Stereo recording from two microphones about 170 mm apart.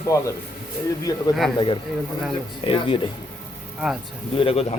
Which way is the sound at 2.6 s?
30° left (ahead or behind).